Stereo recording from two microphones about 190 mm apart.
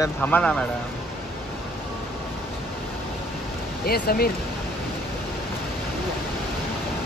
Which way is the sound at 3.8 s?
50° left (ahead or behind).